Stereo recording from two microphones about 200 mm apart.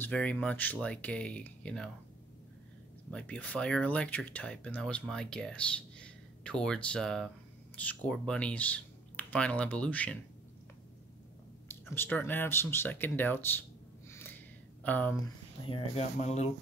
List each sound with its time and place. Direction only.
0.0 s speech: 5° left (ahead or behind)
3.1 s speech: 5° left (ahead or behind)
11.6 s speech: 10° left (ahead or behind)
14.8 s speech: 10° left (ahead or behind)
15.7 s speech: 30° left (ahead or behind)